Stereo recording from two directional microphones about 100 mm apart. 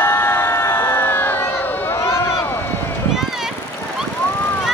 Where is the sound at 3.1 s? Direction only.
5° right (ahead or behind).